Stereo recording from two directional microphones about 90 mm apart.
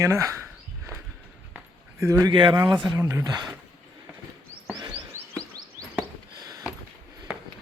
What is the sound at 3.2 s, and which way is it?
Speech, 50° right (ahead or behind).